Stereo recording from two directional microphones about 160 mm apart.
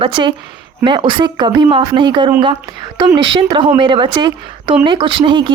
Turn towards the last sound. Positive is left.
turn(degrees=-30)  # may be behind; listen again after turning